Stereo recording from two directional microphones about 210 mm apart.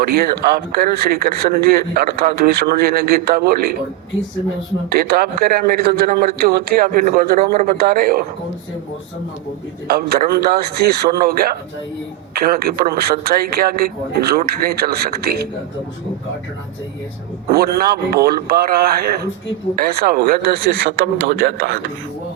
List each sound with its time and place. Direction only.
0.2 s speech: 45° right (ahead or behind)
4.9 s speech: 45° right (ahead or behind)
9.8 s speech: 50° right (ahead or behind)
17.5 s speech: 45° right (ahead or behind)